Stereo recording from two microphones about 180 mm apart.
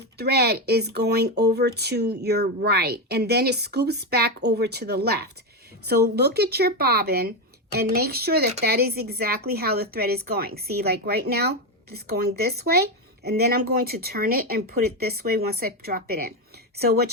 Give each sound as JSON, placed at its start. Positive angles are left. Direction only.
{"t": 0.2, "sound": "speech", "side_deg": -65}